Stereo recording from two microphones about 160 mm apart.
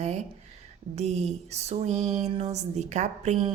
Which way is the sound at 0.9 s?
45° right (ahead or behind).